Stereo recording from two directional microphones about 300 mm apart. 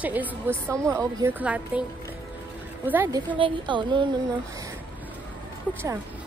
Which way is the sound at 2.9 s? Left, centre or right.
Centre.